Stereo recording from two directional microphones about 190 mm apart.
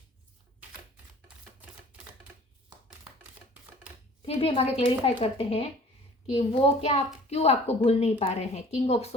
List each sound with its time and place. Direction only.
4.4 s a woman's voice: 30° left (ahead or behind)